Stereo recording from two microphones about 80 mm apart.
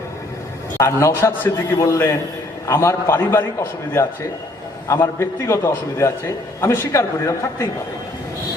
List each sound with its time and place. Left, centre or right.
0.8 s a man's voice: left